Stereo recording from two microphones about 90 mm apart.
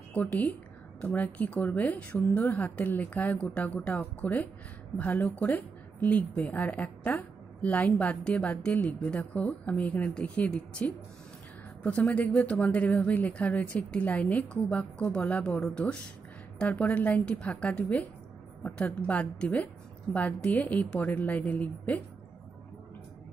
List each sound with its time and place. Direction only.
0.1 s a woman's voice: 15° left (ahead or behind)